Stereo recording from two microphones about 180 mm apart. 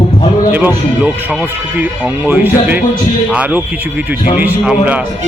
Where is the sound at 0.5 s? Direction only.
10° right (ahead or behind).